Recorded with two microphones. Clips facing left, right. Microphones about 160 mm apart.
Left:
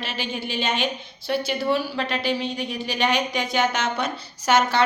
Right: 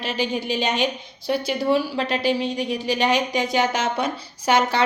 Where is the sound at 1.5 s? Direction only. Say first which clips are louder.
Right 5 dB; 15° right (ahead or behind).